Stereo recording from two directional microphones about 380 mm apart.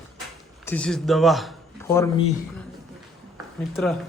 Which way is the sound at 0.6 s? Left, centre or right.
Centre.